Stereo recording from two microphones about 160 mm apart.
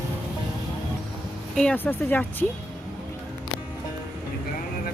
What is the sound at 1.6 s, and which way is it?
Speech, 10° left (ahead or behind).